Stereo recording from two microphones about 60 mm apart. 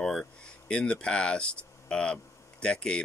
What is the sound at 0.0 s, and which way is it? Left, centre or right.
Speech, centre.